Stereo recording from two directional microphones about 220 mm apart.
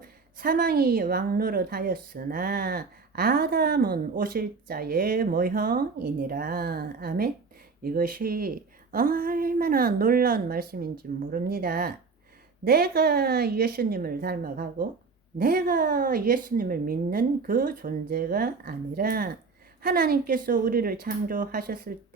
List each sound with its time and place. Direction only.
0.0 s a woman's voice: 40° right (ahead or behind)